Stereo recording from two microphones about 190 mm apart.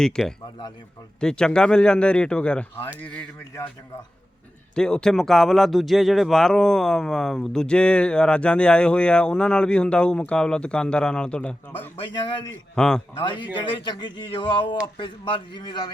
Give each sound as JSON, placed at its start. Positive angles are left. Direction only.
{"t": 0.0, "sound": "speech", "side_deg": 0}
{"t": 4.7, "sound": "speech", "side_deg": 5}
{"t": 11.9, "sound": "speech", "side_deg": 25}
{"t": 12.7, "sound": "speech", "side_deg": 5}
{"t": 13.1, "sound": "speech", "side_deg": 25}